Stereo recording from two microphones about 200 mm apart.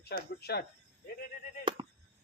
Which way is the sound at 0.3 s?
55° left (ahead or behind).